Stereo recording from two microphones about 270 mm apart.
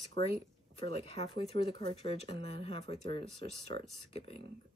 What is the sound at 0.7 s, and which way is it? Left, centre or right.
Speech, left.